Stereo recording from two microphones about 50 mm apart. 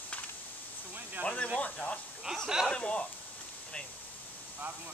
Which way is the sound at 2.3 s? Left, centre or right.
Centre.